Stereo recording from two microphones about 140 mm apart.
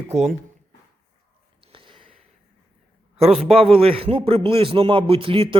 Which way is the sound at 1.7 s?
40° right (ahead or behind).